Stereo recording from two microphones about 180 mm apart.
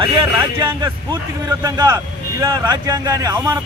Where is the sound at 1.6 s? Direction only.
20° right (ahead or behind).